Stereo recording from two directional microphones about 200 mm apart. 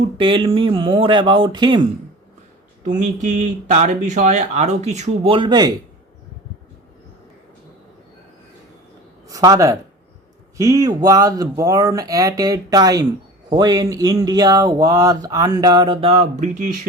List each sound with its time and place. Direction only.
0.2 s speech: 25° right (ahead or behind)
2.8 s speech: 40° right (ahead or behind); by 5.7 s 20° right (ahead or behind)
9.3 s speech: 15° right (ahead or behind); by 16.7 s 35° right (ahead or behind)